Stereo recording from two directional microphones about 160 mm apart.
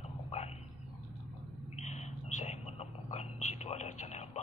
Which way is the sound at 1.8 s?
45° left (ahead or behind).